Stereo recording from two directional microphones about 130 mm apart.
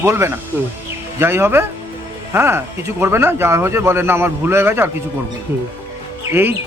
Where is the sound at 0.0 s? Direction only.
20° right (ahead or behind).